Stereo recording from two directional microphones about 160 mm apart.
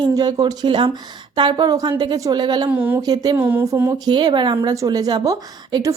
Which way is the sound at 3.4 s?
10° right (ahead or behind).